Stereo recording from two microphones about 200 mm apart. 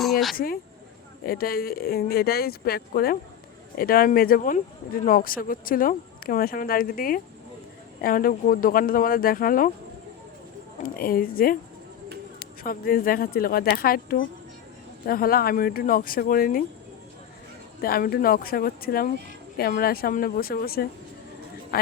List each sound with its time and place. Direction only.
0.0 s a sound: centre (ahead or behind)
0.3 s speech: 50° left (ahead or behind)
10.8 s speech: 45° left (ahead or behind)
12.6 s speech: 45° left (ahead or behind)
17.7 s speech: 50° left (ahead or behind)